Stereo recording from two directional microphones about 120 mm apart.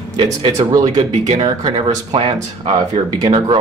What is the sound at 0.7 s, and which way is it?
Speech, 35° right (ahead or behind).